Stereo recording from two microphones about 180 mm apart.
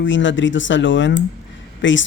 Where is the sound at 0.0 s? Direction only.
90° left.